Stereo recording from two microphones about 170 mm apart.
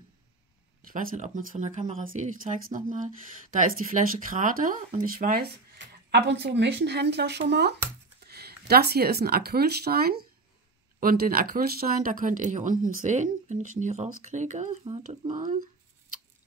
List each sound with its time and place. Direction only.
0.8 s speech: 50° right (ahead or behind)